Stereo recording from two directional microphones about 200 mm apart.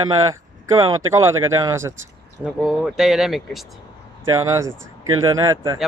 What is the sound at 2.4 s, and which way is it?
Speech, 5° right (ahead or behind).